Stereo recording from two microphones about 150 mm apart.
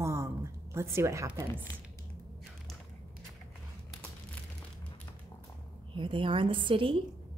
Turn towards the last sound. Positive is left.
turn(degrees=-35)  # may be behind; listen again after turning